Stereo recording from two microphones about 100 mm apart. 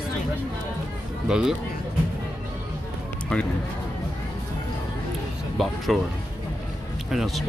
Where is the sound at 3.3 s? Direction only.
10° left (ahead or behind).